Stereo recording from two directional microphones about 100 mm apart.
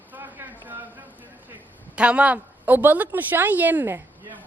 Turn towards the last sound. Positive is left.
turn(degrees=-20)  # may be behind; listen again after turning